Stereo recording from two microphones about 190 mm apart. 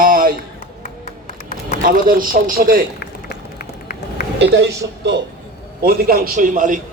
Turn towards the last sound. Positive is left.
turn(degrees=-45)  # may be behind; listen again after turning